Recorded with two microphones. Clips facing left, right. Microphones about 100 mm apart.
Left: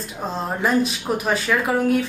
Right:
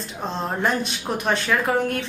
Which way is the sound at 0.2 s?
5° left (ahead or behind).